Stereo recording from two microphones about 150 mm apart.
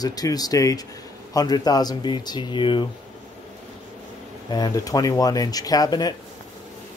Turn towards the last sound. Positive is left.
turn(degrees=25)  # may be behind; listen again after turning